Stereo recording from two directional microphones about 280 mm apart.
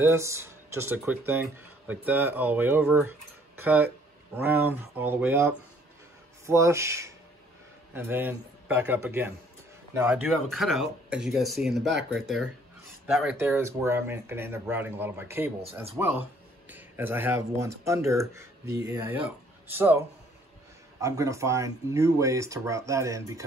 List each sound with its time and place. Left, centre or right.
0.0 s speech: centre
11.8 s speech: right
12.1 s speech: centre
21.0 s speech: centre